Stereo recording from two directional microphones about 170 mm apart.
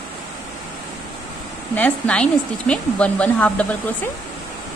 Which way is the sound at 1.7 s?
5° left (ahead or behind).